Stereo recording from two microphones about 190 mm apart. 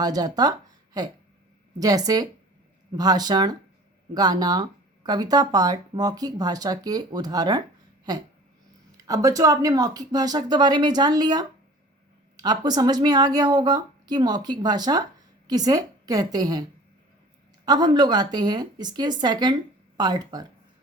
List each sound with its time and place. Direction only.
0.0 s speech: 20° right (ahead or behind)
17.7 s speech: 20° right (ahead or behind)